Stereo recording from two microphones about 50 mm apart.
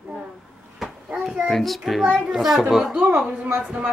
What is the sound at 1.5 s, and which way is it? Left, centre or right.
A woman's voice, centre.